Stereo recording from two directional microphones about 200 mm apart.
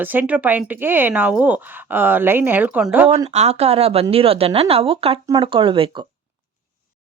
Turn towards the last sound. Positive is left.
turn(degrees=-25)  # may be behind; listen again after turning